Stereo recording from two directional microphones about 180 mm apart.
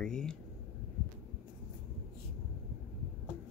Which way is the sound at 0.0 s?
5° left (ahead or behind).